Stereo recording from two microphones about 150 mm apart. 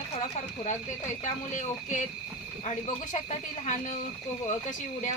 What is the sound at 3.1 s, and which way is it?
Speech, 55° left (ahead or behind).